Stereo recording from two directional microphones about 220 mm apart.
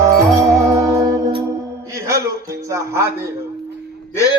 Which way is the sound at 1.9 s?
15° right (ahead or behind).